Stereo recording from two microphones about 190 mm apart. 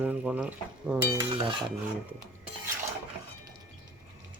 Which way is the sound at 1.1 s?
20° right (ahead or behind).